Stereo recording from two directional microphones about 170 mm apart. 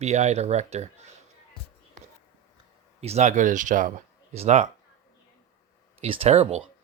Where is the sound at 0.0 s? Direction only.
40° right (ahead or behind).